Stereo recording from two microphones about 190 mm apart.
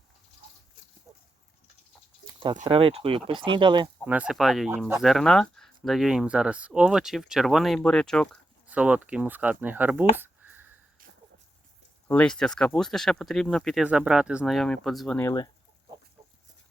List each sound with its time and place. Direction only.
2.2 s a sound: 25° right (ahead or behind)
2.6 s speech: 30° right (ahead or behind)
4.0 s speech: 10° right (ahead or behind)
8.6 s speech: 5° right (ahead or behind)
12.0 s speech: 5° left (ahead or behind)